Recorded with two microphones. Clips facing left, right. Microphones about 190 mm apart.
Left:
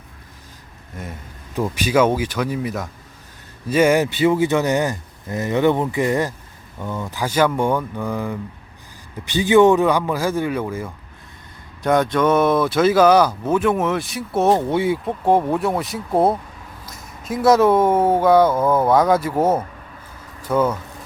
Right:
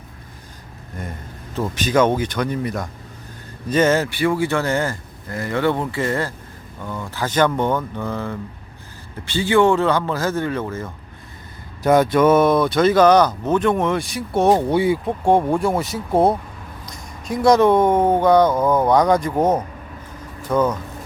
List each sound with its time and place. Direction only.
1.0 s speech: centre (ahead or behind)
11.8 s speech: 5° right (ahead or behind)